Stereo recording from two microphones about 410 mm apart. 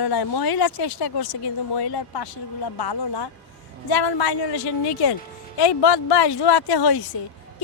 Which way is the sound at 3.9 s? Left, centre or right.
Left.